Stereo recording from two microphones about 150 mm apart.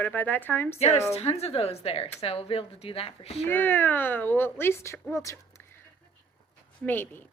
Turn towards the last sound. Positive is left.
turn(degrees=10)  # may be behind; listen again after turning